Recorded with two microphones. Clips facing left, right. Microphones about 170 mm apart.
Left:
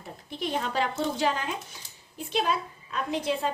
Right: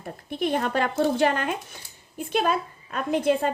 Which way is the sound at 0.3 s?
55° right (ahead or behind).